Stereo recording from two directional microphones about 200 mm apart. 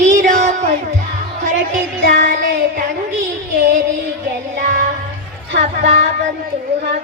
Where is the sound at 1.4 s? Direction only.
40° right (ahead or behind).